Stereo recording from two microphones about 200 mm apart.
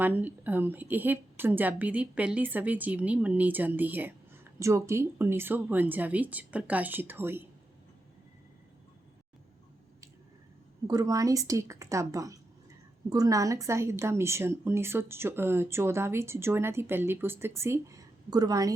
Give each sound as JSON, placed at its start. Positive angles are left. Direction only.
{"t": 0.0, "sound": "a woman's voice", "side_deg": -10}
{"t": 10.8, "sound": "a woman's voice", "side_deg": -20}